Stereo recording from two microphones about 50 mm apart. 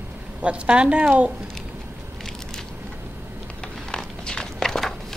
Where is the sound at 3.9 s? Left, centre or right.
Centre.